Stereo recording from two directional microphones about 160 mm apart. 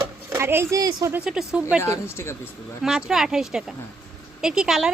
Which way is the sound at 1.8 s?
15° left (ahead or behind).